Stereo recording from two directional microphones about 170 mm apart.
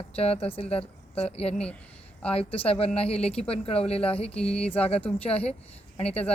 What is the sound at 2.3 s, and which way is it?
Speech, 35° left (ahead or behind).